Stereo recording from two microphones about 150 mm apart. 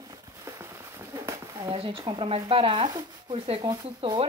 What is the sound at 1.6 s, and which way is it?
Speech, 35° right (ahead or behind).